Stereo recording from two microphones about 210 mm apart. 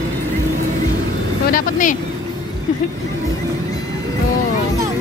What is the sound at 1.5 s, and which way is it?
Vehicle, 40° left (ahead or behind).